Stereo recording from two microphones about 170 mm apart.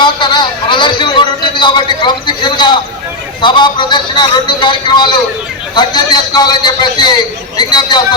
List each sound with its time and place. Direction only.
0.0 s a man's voice: 25° left (ahead or behind)